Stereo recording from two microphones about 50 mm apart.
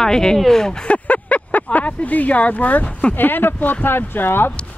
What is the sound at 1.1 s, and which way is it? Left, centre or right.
Speech, left.